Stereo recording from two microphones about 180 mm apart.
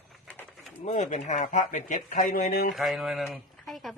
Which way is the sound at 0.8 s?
40° left (ahead or behind).